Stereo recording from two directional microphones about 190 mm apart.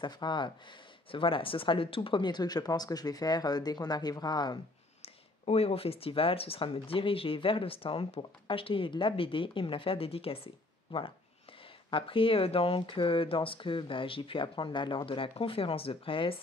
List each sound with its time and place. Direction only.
0.0 s speech: 25° left (ahead or behind)
5.0 s speech: 30° left (ahead or behind)